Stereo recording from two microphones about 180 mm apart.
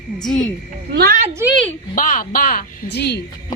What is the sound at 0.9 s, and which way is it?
Speech, 60° right (ahead or behind).